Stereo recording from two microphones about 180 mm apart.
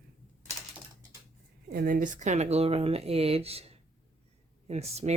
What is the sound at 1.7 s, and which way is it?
Speech, 50° right (ahead or behind).